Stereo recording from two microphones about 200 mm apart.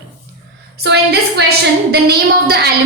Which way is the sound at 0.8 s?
55° right (ahead or behind).